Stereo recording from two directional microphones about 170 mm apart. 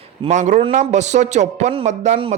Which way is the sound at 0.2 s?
45° right (ahead or behind).